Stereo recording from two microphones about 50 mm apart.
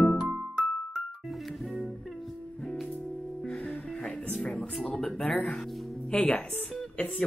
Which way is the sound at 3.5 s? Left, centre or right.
Left.